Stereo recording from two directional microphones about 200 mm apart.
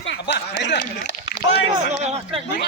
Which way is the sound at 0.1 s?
60° left (ahead or behind).